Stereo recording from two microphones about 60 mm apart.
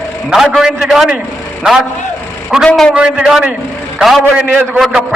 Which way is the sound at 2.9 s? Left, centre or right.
Centre.